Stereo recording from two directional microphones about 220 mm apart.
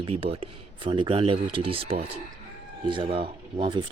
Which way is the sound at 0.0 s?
25° right (ahead or behind).